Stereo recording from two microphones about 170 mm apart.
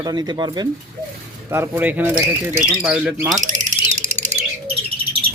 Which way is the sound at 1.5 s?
15° right (ahead or behind).